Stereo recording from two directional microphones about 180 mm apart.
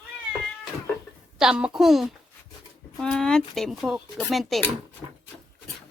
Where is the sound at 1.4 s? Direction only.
5° right (ahead or behind).